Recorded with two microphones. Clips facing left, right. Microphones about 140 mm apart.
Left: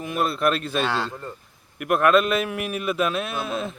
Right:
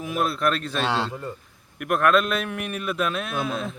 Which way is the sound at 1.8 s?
5° left (ahead or behind).